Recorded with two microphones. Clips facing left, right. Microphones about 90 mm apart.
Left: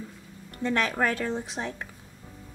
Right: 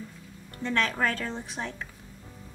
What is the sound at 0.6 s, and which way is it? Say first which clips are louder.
Speech: left 2 dB; 15° left (ahead or behind).